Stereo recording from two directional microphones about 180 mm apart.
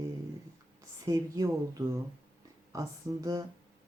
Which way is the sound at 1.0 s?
20° right (ahead or behind).